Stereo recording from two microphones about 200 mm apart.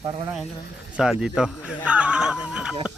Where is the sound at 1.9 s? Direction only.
5° right (ahead or behind).